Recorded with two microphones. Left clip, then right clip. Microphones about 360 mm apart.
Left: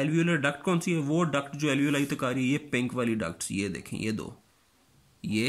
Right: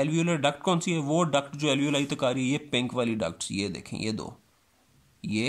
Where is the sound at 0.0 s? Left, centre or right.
Centre.